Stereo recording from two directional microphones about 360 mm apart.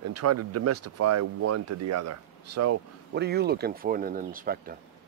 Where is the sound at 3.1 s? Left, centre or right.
Right.